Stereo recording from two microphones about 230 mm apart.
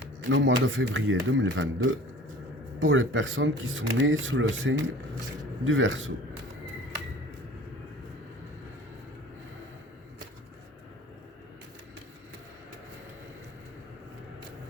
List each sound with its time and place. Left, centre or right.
0.3 s speech: right